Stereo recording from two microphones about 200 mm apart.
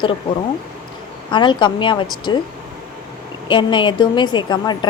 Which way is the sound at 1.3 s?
25° left (ahead or behind).